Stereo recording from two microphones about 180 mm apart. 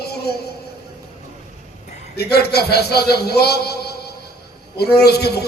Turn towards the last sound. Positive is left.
turn(degrees=65)  # may be behind; listen again after turning